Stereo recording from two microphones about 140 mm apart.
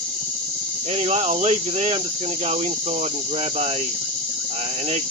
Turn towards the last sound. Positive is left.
turn(degrees=-50)  # may be behind; listen again after turning